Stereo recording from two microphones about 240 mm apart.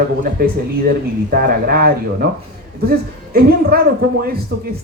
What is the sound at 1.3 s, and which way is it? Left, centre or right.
Speech, right.